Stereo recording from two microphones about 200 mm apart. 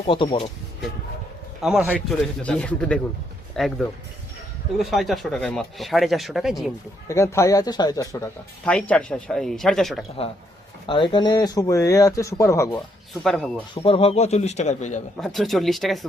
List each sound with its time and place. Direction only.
0.0 s speech: 25° left (ahead or behind)
1.6 s speech: 5° right (ahead or behind)
7.1 s speech: 15° left (ahead or behind)
8.6 s speech: 5° left (ahead or behind)
10.8 s speech: 25° left (ahead or behind)
13.2 s speech: centre (ahead or behind)
13.8 s speech: 30° left (ahead or behind)
15.2 s speech: centre (ahead or behind)